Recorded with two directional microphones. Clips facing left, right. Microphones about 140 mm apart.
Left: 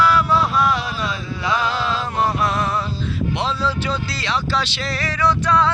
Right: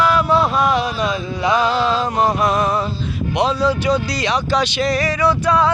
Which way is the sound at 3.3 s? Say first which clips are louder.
Right 8 dB; 15° right (ahead or behind).